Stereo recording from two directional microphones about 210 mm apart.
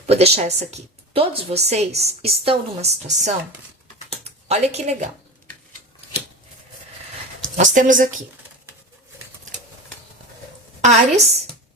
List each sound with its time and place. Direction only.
0.0 s a woman's voice: 30° right (ahead or behind)
7.5 s a woman's voice: 35° right (ahead or behind)
10.8 s a woman's voice: 30° right (ahead or behind)